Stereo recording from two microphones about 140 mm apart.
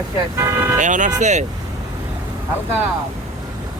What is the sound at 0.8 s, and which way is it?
Speech, 65° right (ahead or behind).